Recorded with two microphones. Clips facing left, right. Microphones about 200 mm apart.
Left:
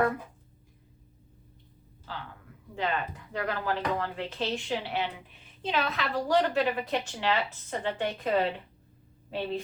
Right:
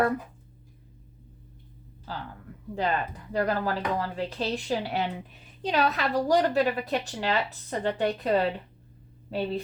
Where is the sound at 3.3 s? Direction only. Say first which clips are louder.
Right 4 dB; 40° right (ahead or behind).